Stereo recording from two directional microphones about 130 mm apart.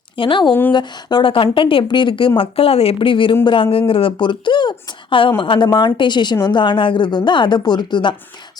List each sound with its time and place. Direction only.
0.2 s a woman's voice: 40° left (ahead or behind)